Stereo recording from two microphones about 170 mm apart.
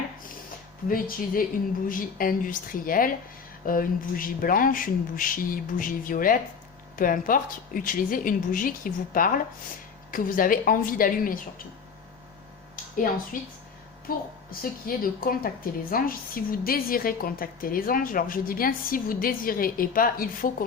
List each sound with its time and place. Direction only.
0.9 s a woman's voice: 55° left (ahead or behind)
13.3 s a woman's voice: 55° left (ahead or behind)